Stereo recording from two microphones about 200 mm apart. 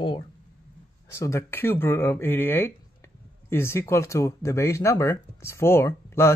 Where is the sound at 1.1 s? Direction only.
15° left (ahead or behind).